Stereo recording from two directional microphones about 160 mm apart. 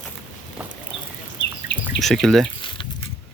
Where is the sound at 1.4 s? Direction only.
30° left (ahead or behind).